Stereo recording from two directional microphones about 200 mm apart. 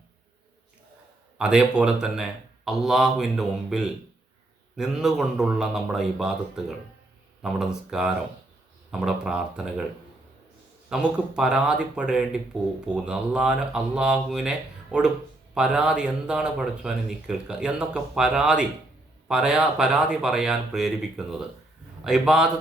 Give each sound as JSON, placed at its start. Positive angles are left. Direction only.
{"t": 1.4, "sound": "speech", "side_deg": -5}
{"t": 10.8, "sound": "speech", "side_deg": -5}